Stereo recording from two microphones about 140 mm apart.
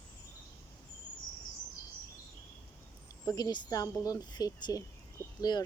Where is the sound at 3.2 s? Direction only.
25° left (ahead or behind).